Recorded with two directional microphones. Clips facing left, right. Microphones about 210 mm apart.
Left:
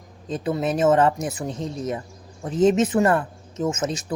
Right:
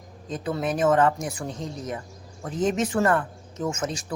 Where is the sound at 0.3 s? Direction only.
20° left (ahead or behind).